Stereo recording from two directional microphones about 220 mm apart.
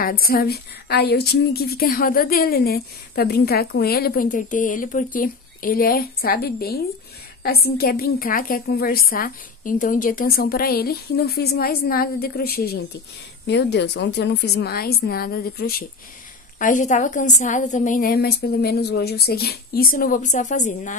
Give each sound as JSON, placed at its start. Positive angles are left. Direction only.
{"t": 0.0, "sound": "a woman's voice", "side_deg": 40}